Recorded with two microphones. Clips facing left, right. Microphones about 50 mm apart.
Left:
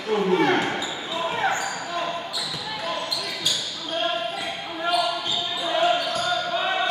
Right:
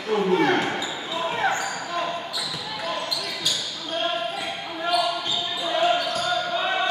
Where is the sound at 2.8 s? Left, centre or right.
Centre.